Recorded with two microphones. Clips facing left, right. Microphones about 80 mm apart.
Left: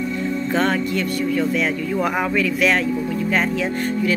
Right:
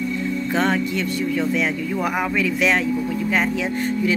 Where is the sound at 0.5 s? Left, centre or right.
Centre.